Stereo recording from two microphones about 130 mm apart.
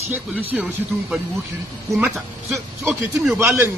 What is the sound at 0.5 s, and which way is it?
Speech, 5° right (ahead or behind).